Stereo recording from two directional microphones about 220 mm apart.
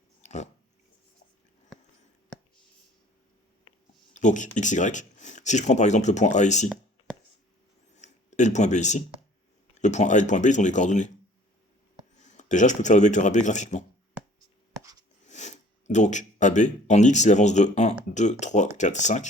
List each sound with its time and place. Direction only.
0.2 s a sound: 30° left (ahead or behind)
4.1 s speech: 35° left (ahead or behind)
7.9 s a sound: 30° left (ahead or behind)
9.7 s speech: 30° left (ahead or behind)
12.2 s speech: 35° left (ahead or behind)
15.3 s speech: 30° left (ahead or behind)